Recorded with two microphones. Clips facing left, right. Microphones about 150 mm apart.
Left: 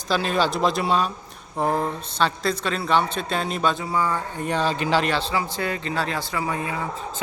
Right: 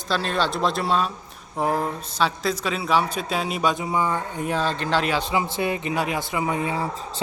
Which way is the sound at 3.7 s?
20° right (ahead or behind).